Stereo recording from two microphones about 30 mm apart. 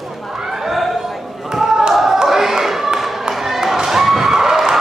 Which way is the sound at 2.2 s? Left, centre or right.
Centre.